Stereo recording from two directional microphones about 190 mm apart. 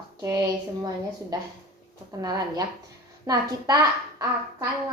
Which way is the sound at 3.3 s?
20° right (ahead or behind).